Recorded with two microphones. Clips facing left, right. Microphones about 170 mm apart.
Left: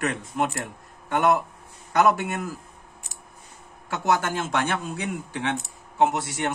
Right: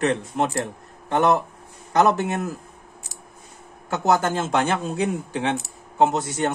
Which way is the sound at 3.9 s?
30° right (ahead or behind).